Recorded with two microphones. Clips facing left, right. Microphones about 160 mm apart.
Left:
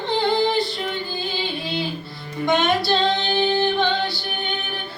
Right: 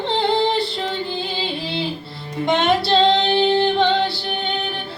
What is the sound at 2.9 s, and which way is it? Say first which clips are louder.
Female singing: right 5 dB; 25° right (ahead or behind).